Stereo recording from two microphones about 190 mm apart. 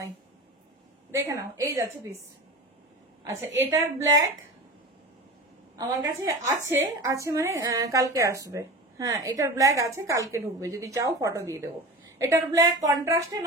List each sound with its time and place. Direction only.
1.1 s a woman's voice: 15° right (ahead or behind)
3.7 s a woman's voice: 15° right (ahead or behind)
5.8 s a woman's voice: 15° right (ahead or behind)